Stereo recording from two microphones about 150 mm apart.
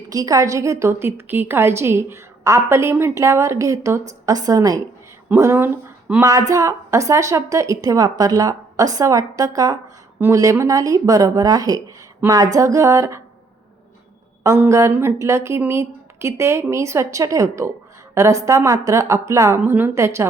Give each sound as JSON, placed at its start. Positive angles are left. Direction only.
{"t": 0.1, "sound": "a woman's voice", "side_deg": -25}
{"t": 14.4, "sound": "a woman's voice", "side_deg": -20}